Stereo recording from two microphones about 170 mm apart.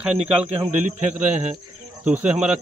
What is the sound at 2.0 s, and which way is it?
Speech, 10° right (ahead or behind).